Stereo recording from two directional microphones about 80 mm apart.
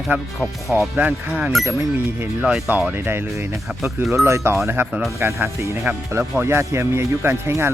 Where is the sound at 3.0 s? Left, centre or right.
Right.